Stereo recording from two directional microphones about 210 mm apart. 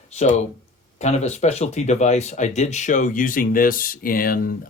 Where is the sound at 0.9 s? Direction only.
30° left (ahead or behind).